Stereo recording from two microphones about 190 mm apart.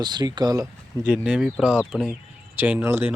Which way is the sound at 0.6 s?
5° right (ahead or behind).